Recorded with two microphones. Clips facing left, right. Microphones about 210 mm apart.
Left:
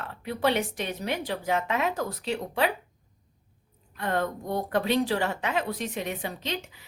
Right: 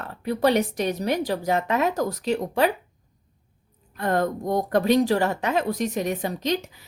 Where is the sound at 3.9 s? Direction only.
40° right (ahead or behind).